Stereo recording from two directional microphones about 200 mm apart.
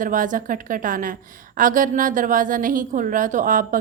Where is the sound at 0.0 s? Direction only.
40° right (ahead or behind).